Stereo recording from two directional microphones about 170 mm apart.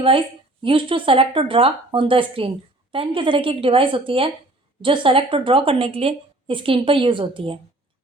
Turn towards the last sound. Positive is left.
turn(degrees=-30)  # may be behind; listen again after turning